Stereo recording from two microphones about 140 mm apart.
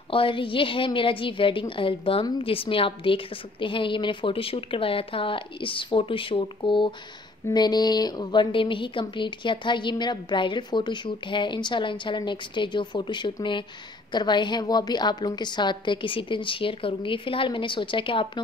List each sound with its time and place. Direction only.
0.1 s a woman's voice: 40° left (ahead or behind)